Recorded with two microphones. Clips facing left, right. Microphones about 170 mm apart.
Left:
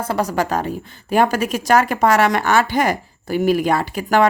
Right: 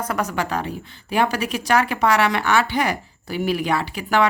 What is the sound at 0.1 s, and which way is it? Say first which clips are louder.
Speech: left 6 dB; 35° left (ahead or behind).